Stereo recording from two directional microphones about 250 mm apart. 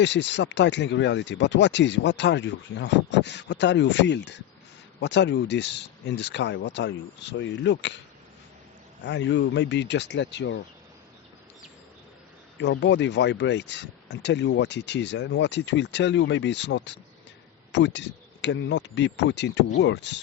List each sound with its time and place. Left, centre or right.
0.0 s speech: left
9.0 s speech: left
12.5 s speech: left